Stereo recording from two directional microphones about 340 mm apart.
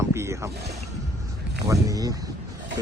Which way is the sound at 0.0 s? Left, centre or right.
Centre.